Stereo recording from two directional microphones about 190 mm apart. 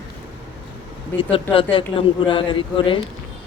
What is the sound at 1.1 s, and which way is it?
A man's voice, 30° left (ahead or behind).